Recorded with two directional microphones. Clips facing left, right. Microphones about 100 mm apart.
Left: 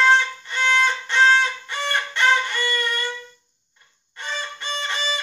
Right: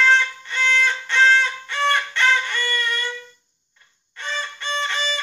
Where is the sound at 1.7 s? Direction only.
15° left (ahead or behind).